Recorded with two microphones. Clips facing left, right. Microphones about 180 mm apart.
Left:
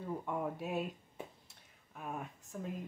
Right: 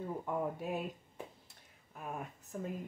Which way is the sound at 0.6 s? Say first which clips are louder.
Even; 5° left (ahead or behind).